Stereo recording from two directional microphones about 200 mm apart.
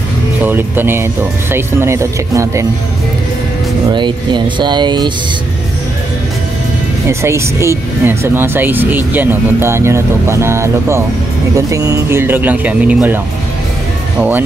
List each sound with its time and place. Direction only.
0.4 s speech: 10° right (ahead or behind)
3.9 s speech: 25° right (ahead or behind)
7.1 s speech: 15° right (ahead or behind)